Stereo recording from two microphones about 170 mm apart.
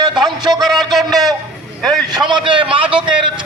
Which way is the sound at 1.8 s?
25° right (ahead or behind).